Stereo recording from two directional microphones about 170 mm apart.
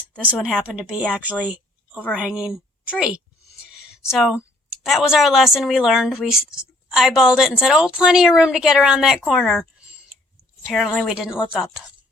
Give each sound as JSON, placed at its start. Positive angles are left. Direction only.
{"t": 0.2, "sound": "speech", "side_deg": -5}
{"t": 1.9, "sound": "a woman's voice", "side_deg": 10}
{"t": 2.1, "sound": "a woman's voice", "side_deg": -5}
{"t": 3.6, "sound": "a sound", "side_deg": -5}
{"t": 4.1, "sound": "a woman's voice", "side_deg": -5}
{"t": 10.7, "sound": "a woman's voice", "side_deg": 0}